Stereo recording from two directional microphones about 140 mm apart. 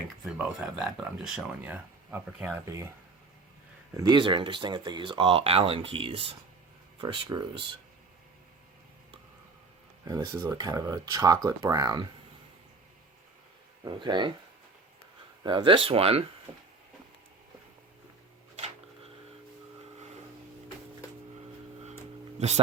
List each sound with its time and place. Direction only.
0.3 s speech: 5° right (ahead or behind)
2.6 s speech: 25° right (ahead or behind)
3.9 s speech: 30° right (ahead or behind)
10.1 s speech: 25° right (ahead or behind)
13.8 s speech: 35° right (ahead or behind)
15.4 s speech: 35° right (ahead or behind)
18.5 s a sound: 45° right (ahead or behind)
22.4 s speech: 50° right (ahead or behind)